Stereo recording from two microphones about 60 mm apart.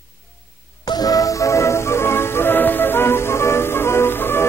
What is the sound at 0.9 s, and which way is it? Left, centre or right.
Music, left.